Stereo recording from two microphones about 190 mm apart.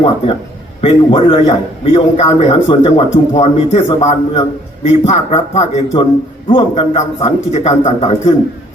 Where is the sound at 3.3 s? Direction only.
35° left (ahead or behind).